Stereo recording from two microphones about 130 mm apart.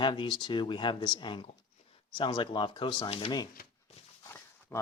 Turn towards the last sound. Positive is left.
turn(degrees=20)  # may be behind; listen again after turning